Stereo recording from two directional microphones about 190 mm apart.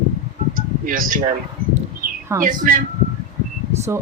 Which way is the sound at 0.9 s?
45° right (ahead or behind).